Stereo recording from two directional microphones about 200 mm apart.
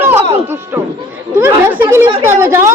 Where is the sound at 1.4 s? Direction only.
10° right (ahead or behind).